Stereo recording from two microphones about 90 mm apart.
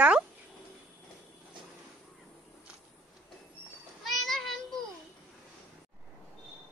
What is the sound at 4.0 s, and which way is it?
Child singing, centre (ahead or behind).